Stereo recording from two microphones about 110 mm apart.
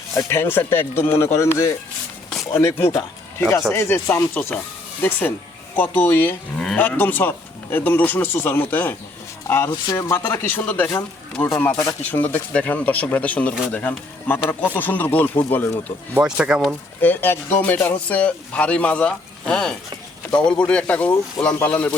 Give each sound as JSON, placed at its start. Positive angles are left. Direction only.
{"t": 0.2, "sound": "speech", "side_deg": 20}
{"t": 9.6, "sound": "speech", "side_deg": 35}
{"t": 16.2, "sound": "speech", "side_deg": -10}
{"t": 17.0, "sound": "speech", "side_deg": 15}